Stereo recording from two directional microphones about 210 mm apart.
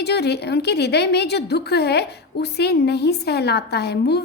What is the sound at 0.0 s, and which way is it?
A woman's voice, 50° left (ahead or behind).